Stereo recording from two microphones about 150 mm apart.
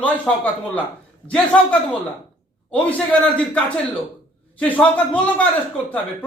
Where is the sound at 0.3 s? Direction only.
5° left (ahead or behind).